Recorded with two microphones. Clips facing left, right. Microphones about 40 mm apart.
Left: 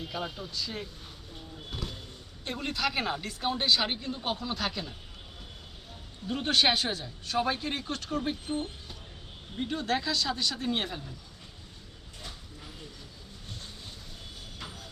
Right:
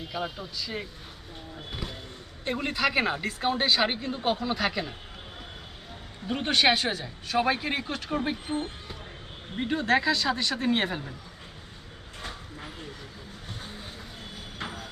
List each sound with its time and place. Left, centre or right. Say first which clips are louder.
0.0 s speech: right 2 dB; centre
1.5 s vehicle: right 2 dB; centre
2.4 s speech: right 4 dB; right
6.2 s speech: right 2 dB; right
6.5 s speech: right 3 dB; centre; by 11.0 s right
12.2 s a sound: right 6 dB; right
14.6 s vehicle: right 8 dB; right